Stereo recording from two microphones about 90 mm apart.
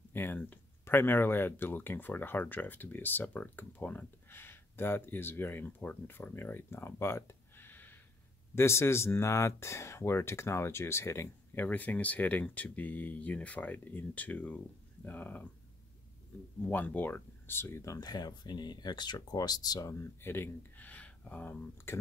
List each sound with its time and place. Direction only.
0.1 s speech: 25° left (ahead or behind)
11.6 s speech: 20° left (ahead or behind)
16.6 s speech: 20° left (ahead or behind)